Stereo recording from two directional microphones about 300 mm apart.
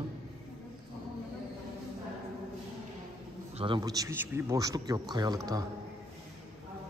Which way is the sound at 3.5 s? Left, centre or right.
Centre.